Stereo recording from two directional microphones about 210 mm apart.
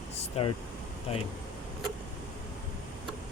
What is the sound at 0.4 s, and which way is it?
Speech, 30° left (ahead or behind).